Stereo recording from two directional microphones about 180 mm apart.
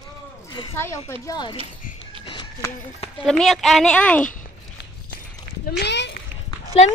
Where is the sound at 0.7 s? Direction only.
15° left (ahead or behind).